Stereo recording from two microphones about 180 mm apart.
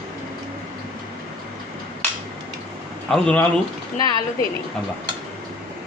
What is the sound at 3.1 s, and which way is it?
Speech, 5° left (ahead or behind).